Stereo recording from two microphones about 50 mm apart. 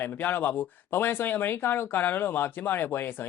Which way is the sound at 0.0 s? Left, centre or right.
Left.